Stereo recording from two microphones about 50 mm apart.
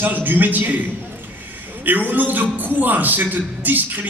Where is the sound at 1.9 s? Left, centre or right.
Right.